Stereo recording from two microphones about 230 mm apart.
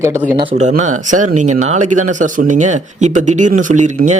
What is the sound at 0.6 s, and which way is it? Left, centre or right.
Speech, right.